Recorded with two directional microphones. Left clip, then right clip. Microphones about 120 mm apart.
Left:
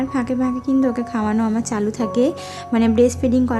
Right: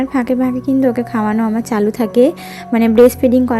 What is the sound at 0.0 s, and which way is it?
A woman's voice, 35° right (ahead or behind).